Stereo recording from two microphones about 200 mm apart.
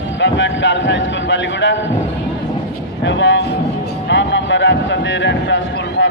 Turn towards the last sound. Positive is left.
turn(degrees=60)  # may be behind; listen again after turning